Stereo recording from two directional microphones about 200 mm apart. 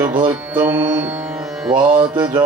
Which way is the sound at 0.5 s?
10° right (ahead or behind).